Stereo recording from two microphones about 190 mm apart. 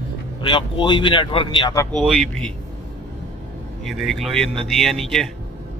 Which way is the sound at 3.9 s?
Centre (ahead or behind).